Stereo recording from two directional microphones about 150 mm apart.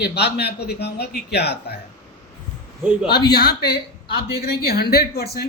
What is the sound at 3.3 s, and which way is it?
Speech, 90° left.